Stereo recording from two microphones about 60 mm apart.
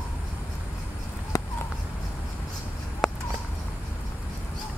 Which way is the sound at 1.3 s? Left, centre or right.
Left.